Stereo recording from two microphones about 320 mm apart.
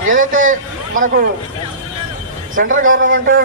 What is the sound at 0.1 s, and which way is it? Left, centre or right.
A man's voice, right.